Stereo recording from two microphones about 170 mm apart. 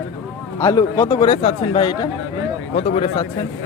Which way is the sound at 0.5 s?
20° left (ahead or behind).